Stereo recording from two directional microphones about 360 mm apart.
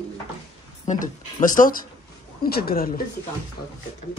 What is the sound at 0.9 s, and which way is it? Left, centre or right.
Speech, left.